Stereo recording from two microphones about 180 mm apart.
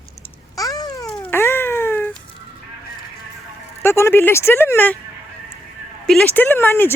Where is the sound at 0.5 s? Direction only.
20° left (ahead or behind).